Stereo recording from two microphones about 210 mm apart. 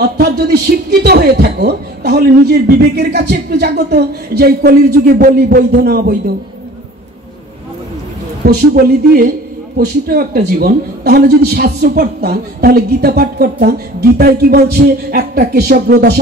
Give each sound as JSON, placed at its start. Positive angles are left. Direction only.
{"t": 0.0, "sound": "a man's voice", "side_deg": -50}
{"t": 8.5, "sound": "a man's voice", "side_deg": -45}